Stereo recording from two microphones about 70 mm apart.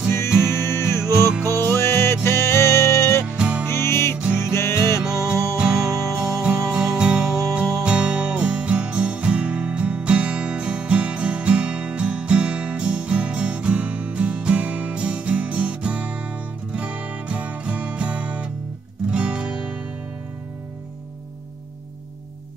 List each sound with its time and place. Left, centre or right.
0.5 s music: left
3.3 s music: centre
3.6 s music: left
5.0 s music: centre